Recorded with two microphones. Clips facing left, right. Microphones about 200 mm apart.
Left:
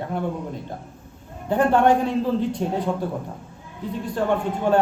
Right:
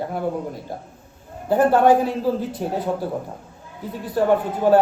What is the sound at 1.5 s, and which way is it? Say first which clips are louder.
A man's voice: right 2 dB; 5° right (ahead or behind).